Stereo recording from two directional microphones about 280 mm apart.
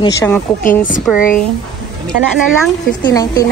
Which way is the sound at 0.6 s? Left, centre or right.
Left.